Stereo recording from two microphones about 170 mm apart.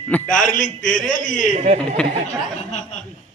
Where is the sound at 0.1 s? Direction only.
5° left (ahead or behind).